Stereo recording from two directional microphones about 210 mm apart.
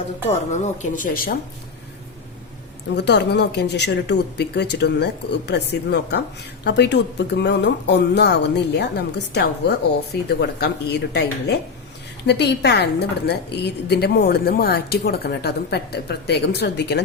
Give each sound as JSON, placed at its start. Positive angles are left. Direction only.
{"t": 0.3, "sound": "speech", "side_deg": 35}
{"t": 2.9, "sound": "a woman's voice", "side_deg": 55}